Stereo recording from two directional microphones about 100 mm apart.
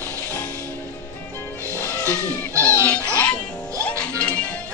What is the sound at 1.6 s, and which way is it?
Music, 30° right (ahead or behind).